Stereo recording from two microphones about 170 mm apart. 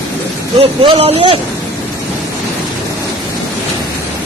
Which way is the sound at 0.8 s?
30° right (ahead or behind).